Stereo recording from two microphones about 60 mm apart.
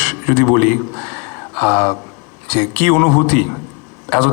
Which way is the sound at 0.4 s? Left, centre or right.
Left.